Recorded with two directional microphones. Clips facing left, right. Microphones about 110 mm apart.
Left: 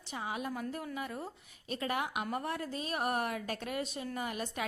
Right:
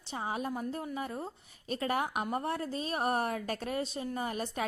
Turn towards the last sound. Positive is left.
turn(degrees=-35)  # may be behind; listen again after turning